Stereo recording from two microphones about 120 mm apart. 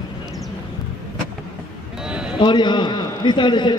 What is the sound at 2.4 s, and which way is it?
A man's voice, 40° left (ahead or behind).